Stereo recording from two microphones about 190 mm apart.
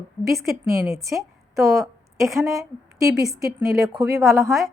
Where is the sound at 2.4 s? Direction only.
15° right (ahead or behind).